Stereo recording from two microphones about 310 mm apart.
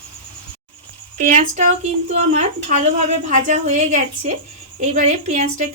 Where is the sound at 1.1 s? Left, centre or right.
Right.